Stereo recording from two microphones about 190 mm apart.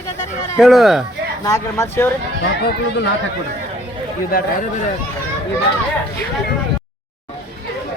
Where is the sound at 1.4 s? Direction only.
15° left (ahead or behind).